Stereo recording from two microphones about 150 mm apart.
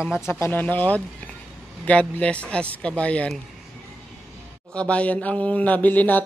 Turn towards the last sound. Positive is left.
turn(degrees=10)  # may be behind; listen again after turning